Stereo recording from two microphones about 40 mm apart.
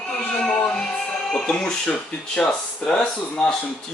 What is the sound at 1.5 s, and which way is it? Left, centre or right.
Speech, centre.